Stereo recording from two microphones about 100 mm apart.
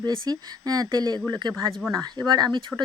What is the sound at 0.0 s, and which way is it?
Speech, 45° right (ahead or behind).